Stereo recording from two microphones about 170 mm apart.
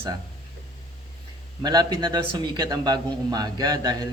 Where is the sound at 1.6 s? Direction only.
25° right (ahead or behind).